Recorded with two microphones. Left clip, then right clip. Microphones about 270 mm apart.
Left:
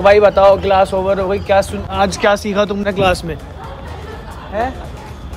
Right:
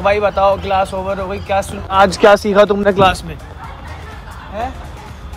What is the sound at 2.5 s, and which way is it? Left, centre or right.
Speech, right.